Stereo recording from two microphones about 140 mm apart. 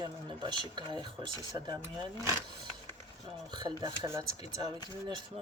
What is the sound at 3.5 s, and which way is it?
Speech, 30° right (ahead or behind).